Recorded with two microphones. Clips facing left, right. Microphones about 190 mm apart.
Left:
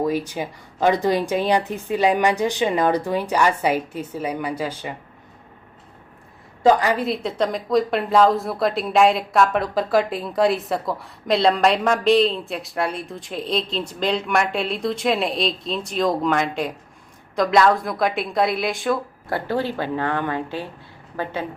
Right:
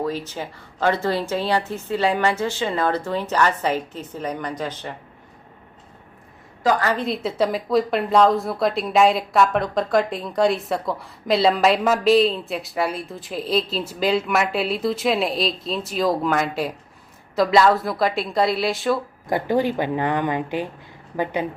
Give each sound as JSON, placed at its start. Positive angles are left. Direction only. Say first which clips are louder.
{"t": 0.0, "sound": "speech", "louder": "left 3 dB", "side_deg": 15}
{"t": 6.6, "sound": "a woman's voice", "louder": "left 4 dB", "side_deg": 25}
{"t": 6.8, "sound": "a woman's voice", "louder": "left 1 dB", "side_deg": 5}
{"t": 19.3, "sound": "speech", "louder": "right 3 dB", "side_deg": -15}